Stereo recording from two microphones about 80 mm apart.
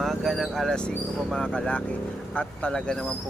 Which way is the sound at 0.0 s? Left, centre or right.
Centre.